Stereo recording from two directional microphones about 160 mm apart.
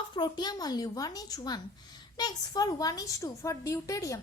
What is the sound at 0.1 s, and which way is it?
Speech, 30° left (ahead or behind).